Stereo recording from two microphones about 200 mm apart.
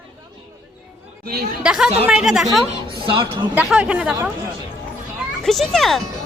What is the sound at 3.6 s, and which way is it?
Speech, 5° right (ahead or behind).